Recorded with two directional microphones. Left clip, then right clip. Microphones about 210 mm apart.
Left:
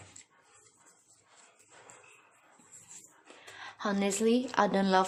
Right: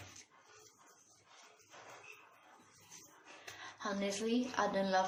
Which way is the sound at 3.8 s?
55° left (ahead or behind).